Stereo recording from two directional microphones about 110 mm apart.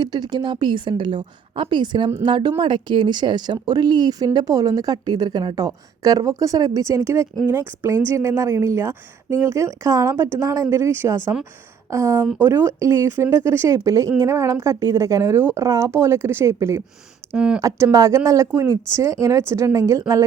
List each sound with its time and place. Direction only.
0.0 s a woman's voice: 40° right (ahead or behind); by 16.8 s 25° right (ahead or behind)
17.3 s speech: 10° right (ahead or behind)
17.6 s a woman's voice: 25° right (ahead or behind)